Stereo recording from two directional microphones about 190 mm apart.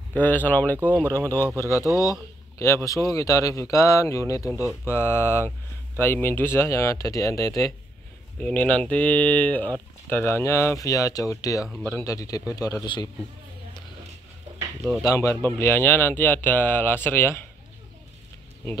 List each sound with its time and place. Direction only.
0.2 s speech: 10° left (ahead or behind)
15.0 s speech: 15° left (ahead or behind)